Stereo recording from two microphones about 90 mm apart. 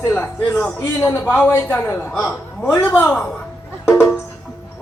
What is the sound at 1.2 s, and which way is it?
Speech, 20° left (ahead or behind).